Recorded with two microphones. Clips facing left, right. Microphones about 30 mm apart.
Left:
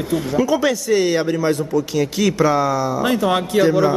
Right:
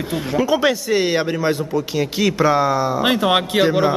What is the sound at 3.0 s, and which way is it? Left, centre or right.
Speech, right.